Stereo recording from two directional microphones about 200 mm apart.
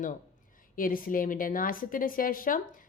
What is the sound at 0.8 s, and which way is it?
A woman's voice, 45° left (ahead or behind).